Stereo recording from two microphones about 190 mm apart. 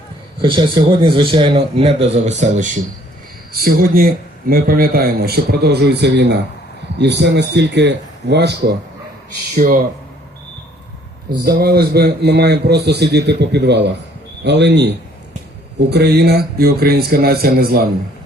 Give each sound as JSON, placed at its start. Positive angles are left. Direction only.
{"t": 1.0, "sound": "speech", "side_deg": -25}
{"t": 3.5, "sound": "a man's voice", "side_deg": -50}
{"t": 9.6, "sound": "a man's voice", "side_deg": -50}
{"t": 11.3, "sound": "a man's voice", "side_deg": -55}
{"t": 15.9, "sound": "a man's voice", "side_deg": -60}